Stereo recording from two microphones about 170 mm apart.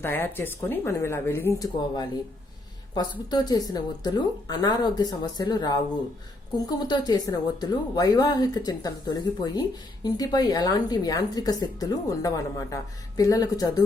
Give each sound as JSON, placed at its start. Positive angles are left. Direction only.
{"t": 0.0, "sound": "speech", "side_deg": 15}